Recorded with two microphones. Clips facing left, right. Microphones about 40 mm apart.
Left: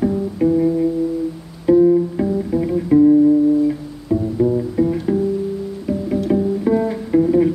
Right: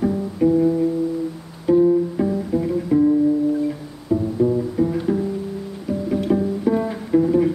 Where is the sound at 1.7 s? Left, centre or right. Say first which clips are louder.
Left 3 dB; centre.